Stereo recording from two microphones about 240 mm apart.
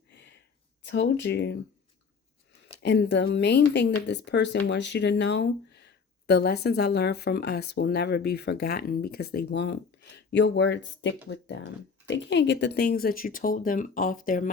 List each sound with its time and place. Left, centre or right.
0.1 s a sound: left
0.8 s speech: left
2.8 s speech: left